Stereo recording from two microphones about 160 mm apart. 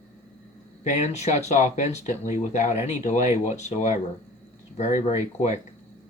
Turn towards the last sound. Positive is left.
turn(degrees=45)  # may be behind; listen again after turning